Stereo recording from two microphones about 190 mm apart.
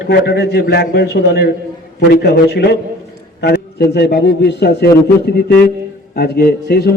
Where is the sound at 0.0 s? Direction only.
60° left (ahead or behind).